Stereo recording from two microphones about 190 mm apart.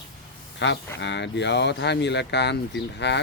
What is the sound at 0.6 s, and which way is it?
Speech, 70° left (ahead or behind).